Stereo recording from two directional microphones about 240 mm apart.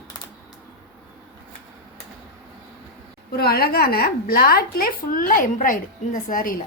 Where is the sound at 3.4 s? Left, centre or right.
Left.